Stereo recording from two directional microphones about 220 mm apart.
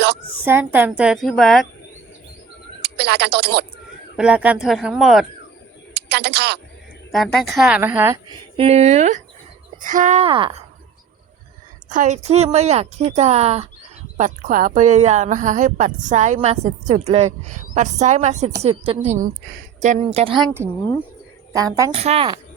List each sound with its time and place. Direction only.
0.4 s a woman's voice: 10° right (ahead or behind)
2.8 s speech: 45° right (ahead or behind)
4.2 s a woman's voice: 5° right (ahead or behind)
5.9 s speech: 45° right (ahead or behind)
7.1 s a woman's voice: centre (ahead or behind)
8.5 s a woman's voice: 25° right (ahead or behind)
11.9 s a woman's voice: 35° right (ahead or behind)
20.3 s a woman's voice: 10° right (ahead or behind)
22.0 s a woman's voice: 25° right (ahead or behind)